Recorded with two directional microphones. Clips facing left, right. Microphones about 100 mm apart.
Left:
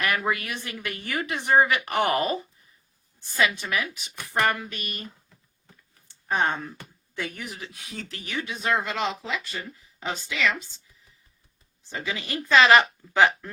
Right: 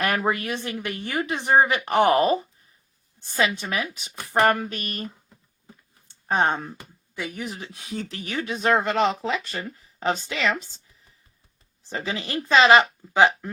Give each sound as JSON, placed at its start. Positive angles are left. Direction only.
{"t": 0.0, "sound": "a woman's voice", "side_deg": -35}
{"t": 6.2, "sound": "speech", "side_deg": -30}
{"t": 7.2, "sound": "speech", "side_deg": -15}
{"t": 7.4, "sound": "a woman's voice", "side_deg": -35}
{"t": 11.9, "sound": "a woman's voice", "side_deg": -40}